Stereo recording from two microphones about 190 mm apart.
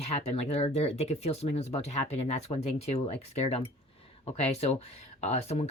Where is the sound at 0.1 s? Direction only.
35° left (ahead or behind).